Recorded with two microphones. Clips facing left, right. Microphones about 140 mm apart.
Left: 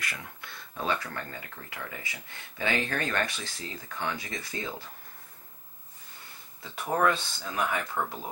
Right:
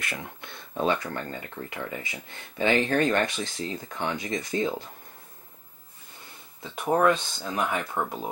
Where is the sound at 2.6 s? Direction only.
25° right (ahead or behind).